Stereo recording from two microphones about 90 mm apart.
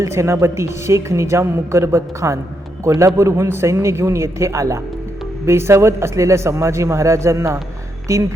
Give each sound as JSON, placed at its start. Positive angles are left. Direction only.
{"t": 0.0, "sound": "a woman's voice", "side_deg": -30}